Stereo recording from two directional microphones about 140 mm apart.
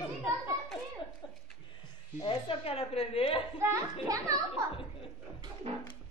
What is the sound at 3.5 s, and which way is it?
Speech, 20° right (ahead or behind).